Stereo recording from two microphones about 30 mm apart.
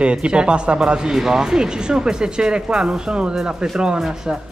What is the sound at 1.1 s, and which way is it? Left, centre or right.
Speech, centre.